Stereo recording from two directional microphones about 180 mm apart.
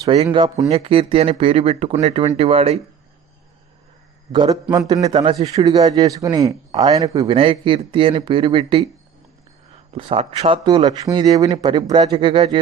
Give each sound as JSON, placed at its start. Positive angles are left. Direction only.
{"t": 0.3, "sound": "speech", "side_deg": -25}
{"t": 4.3, "sound": "speech", "side_deg": -25}
{"t": 5.1, "sound": "speech", "side_deg": -30}
{"t": 5.5, "sound": "speech", "side_deg": -20}
{"t": 7.3, "sound": "speech", "side_deg": -30}
{"t": 9.9, "sound": "speech", "side_deg": -30}